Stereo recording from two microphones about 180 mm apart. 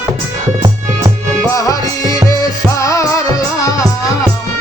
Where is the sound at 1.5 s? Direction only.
20° left (ahead or behind).